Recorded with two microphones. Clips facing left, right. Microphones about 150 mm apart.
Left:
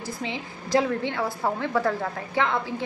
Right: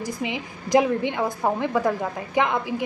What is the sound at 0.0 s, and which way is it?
A woman's voice, 15° right (ahead or behind).